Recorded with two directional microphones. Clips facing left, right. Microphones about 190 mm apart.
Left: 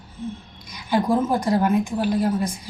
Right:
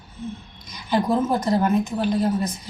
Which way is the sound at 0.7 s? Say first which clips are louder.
Left 1 dB; 10° left (ahead or behind).